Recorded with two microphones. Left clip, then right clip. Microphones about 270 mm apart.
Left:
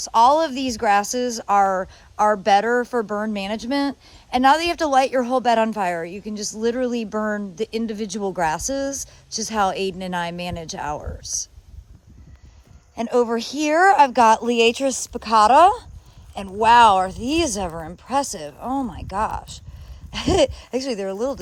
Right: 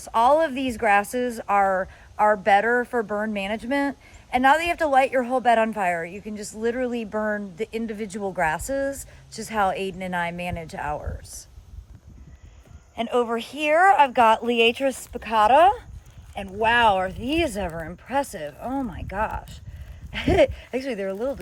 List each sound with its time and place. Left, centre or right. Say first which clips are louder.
0.1 s speech: left 3 dB; centre
6.1 s speech: left 3 dB; left
6.3 s speech: left 3 dB; centre
13.0 s speech: left 3 dB; centre
15.1 s speech: left 4 dB; left
18.1 s speech: left 3 dB; centre
18.3 s speech: left 3 dB; left
20.1 s speech: left 1 dB; centre
20.6 s speech: left 3 dB; left